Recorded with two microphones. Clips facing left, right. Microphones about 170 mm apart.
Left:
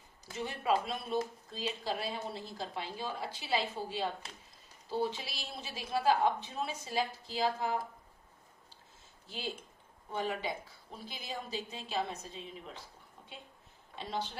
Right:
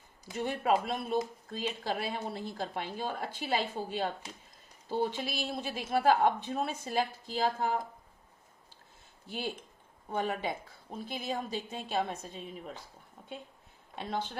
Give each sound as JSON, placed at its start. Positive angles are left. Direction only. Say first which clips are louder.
{"t": 0.3, "sound": "a woman's voice", "louder": "right 3 dB", "side_deg": -55}
{"t": 10.1, "sound": "a woman's voice", "louder": "right 3 dB", "side_deg": -50}
{"t": 13.9, "sound": "speech", "louder": "right 2 dB", "side_deg": -55}